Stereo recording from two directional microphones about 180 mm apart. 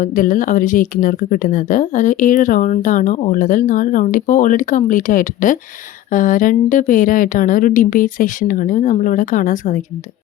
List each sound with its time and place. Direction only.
0.0 s speech: 50° left (ahead or behind)